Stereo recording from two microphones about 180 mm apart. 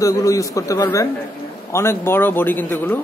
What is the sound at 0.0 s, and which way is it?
Speech, 20° left (ahead or behind).